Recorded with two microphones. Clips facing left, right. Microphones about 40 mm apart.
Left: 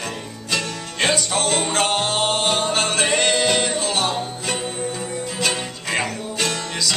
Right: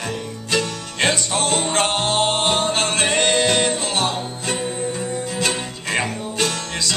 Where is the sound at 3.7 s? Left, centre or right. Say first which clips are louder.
Even; right.